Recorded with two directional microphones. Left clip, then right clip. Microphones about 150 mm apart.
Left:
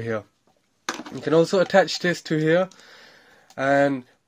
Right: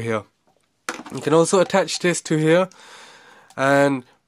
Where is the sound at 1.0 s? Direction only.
30° right (ahead or behind).